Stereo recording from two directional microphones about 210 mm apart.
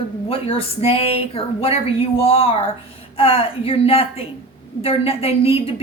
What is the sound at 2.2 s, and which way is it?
A woman's voice, 25° left (ahead or behind).